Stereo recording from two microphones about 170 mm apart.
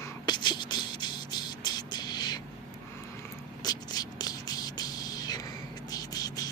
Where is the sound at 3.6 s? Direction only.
25° left (ahead or behind).